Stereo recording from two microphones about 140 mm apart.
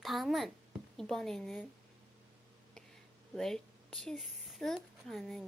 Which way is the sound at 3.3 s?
5° left (ahead or behind).